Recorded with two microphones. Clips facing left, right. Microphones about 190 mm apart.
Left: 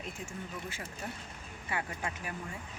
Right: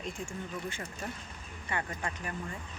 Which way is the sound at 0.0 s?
5° left (ahead or behind).